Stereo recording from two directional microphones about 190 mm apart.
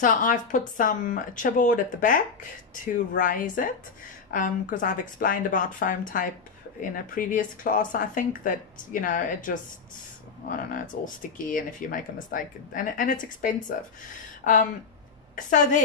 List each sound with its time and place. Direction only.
0.0 s speech: 45° left (ahead or behind)
11.3 s speech: 45° left (ahead or behind)